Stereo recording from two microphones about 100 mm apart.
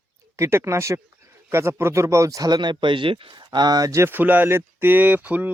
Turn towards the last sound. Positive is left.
turn(degrees=-15)  # may be behind; listen again after turning